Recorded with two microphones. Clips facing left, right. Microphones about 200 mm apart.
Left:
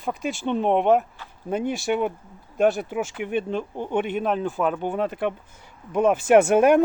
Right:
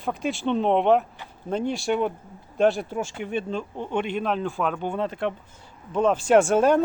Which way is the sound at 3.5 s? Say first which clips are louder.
Left 2 dB; 15° left (ahead or behind).